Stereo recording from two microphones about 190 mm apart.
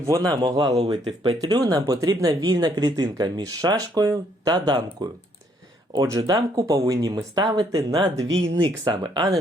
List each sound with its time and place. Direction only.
0.0 s speech: 20° right (ahead or behind)
5.9 s speech: 20° right (ahead or behind)